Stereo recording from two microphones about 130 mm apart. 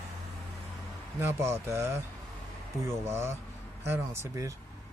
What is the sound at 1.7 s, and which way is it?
Speech, 20° right (ahead or behind).